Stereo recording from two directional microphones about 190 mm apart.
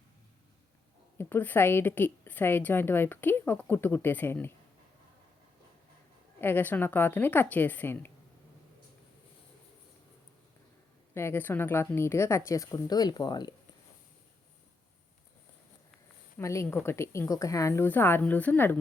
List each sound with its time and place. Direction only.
1.2 s a woman's voice: 10° left (ahead or behind)
6.4 s a woman's voice: 10° left (ahead or behind)
11.1 s a woman's voice: 15° left (ahead or behind)
16.4 s a woman's voice: 15° left (ahead or behind)